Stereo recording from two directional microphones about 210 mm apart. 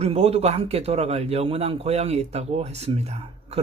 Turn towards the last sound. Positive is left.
turn(degrees=-30)  # may be behind; listen again after turning